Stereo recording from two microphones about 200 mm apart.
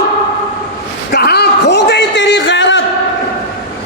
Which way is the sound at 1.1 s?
55° left (ahead or behind).